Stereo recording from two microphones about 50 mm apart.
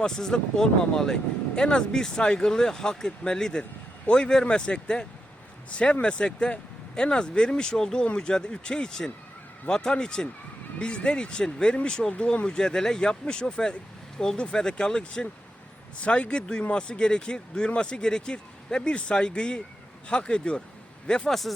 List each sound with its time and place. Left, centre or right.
0.0 s speech: centre
12.1 s speech: left
21.2 s speech: centre